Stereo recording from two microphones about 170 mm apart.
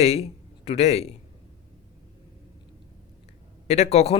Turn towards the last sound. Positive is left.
turn(degrees=40)  # may be behind; listen again after turning